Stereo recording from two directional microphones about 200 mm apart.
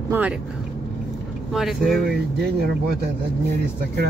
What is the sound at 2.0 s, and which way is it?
Speech, 55° right (ahead or behind).